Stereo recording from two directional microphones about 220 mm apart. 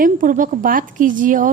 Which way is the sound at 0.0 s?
40° right (ahead or behind).